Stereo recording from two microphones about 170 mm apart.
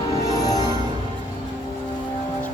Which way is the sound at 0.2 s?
20° left (ahead or behind).